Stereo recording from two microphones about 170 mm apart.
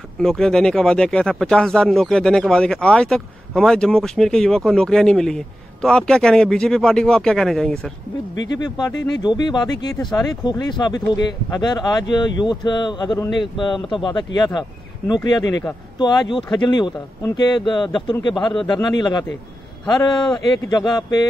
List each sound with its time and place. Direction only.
0.2 s speech: 5° left (ahead or behind)
8.5 s speech: 25° left (ahead or behind)
20.2 s speech: 25° left (ahead or behind)